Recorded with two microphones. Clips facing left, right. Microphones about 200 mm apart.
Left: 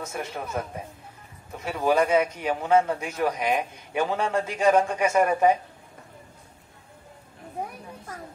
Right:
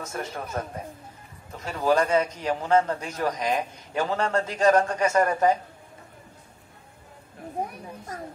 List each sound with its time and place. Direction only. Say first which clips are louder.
0.0 s a man's voice: even; 10° left (ahead or behind)